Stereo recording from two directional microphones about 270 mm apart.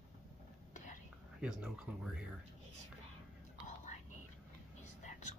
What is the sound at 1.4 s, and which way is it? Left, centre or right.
Speech, centre.